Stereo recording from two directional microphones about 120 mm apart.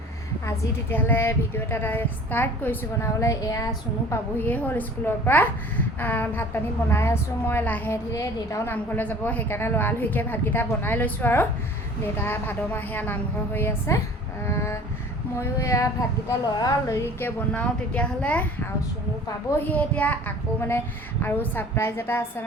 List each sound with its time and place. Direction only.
0.9 s a woman's voice: 15° left (ahead or behind)
4.1 s a woman's voice: 15° left (ahead or behind)
8.1 s a sound: 25° left (ahead or behind)
8.7 s a woman's voice: 15° left (ahead or behind)
14.4 s a sound: 20° left (ahead or behind)
16.6 s a woman's voice: 30° left (ahead or behind)
17.2 s a woman's voice: 15° left (ahead or behind)
19.7 s a woman's voice: 10° left (ahead or behind)